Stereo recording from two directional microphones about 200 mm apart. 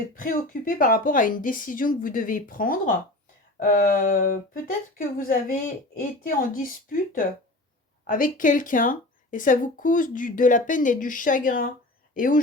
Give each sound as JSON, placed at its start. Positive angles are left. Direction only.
{"t": 0.2, "sound": "speech", "side_deg": 45}